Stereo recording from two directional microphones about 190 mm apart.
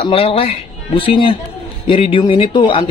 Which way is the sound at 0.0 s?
30° left (ahead or behind).